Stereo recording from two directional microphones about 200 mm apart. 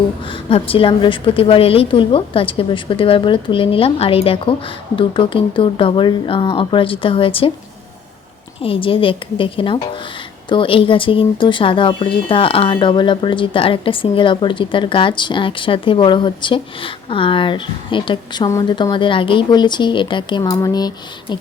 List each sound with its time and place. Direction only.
0.3 s speech: 25° left (ahead or behind)
8.6 s speech: 25° left (ahead or behind)